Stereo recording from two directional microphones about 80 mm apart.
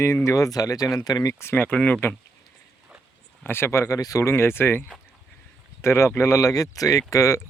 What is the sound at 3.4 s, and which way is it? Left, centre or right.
Speech, left.